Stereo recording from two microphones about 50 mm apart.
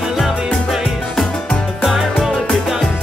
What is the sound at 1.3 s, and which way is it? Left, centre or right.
Music, left.